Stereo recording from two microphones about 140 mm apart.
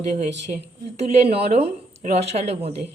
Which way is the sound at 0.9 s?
50° right (ahead or behind).